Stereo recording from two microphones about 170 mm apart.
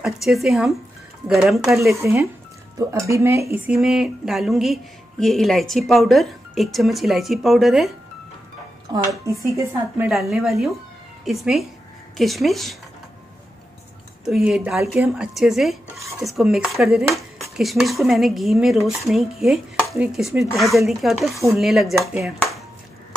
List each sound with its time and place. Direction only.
0.0 s dishes: centre (ahead or behind)
3.1 s dishes: 15° right (ahead or behind); by 7.9 s centre (ahead or behind)
9.2 s a woman's voice: 20° right (ahead or behind)
10.3 s dishes: centre (ahead or behind)
14.2 s dishes: centre (ahead or behind)
22.2 s speech: centre (ahead or behind)